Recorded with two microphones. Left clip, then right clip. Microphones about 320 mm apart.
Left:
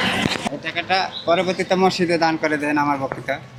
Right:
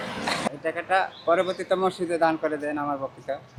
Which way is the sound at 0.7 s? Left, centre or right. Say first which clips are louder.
Left 3 dB; left.